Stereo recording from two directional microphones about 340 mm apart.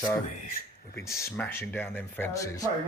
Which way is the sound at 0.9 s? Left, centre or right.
Centre.